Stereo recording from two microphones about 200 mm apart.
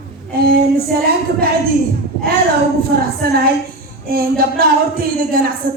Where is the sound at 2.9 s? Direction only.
50° right (ahead or behind).